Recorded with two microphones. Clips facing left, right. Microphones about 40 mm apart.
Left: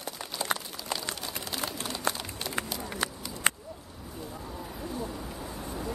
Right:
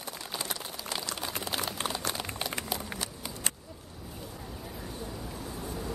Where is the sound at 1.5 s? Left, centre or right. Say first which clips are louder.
Right 1 dB; right.